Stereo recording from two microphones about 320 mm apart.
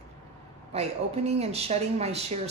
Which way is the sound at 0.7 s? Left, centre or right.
Centre.